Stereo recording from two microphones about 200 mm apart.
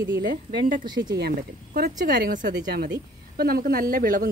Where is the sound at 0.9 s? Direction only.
20° right (ahead or behind).